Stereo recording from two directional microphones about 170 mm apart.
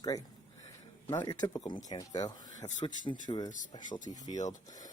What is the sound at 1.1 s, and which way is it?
Speech, 25° left (ahead or behind).